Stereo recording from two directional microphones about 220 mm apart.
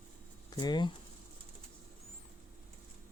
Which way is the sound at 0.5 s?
20° left (ahead or behind).